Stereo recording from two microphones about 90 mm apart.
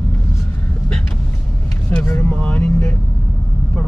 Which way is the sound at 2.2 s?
15° left (ahead or behind).